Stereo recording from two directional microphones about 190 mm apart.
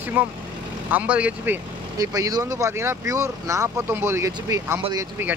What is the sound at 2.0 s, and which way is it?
Speech, 20° right (ahead or behind).